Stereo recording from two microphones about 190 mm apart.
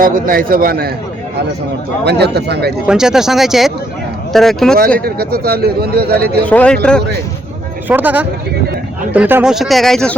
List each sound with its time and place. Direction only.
0.0 s a man's voice: 50° right (ahead or behind)
2.0 s speech: 60° right (ahead or behind)
2.8 s speech: 5° right (ahead or behind)
4.9 s speech: 55° right (ahead or behind)
6.4 s speech: 5° left (ahead or behind)
7.9 s speech: 10° right (ahead or behind)